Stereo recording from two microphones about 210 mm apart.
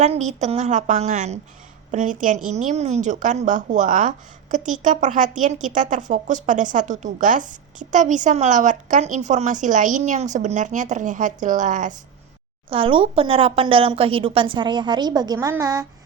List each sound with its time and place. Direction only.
0.0 s speech: 35° right (ahead or behind)
12.7 s speech: 25° right (ahead or behind)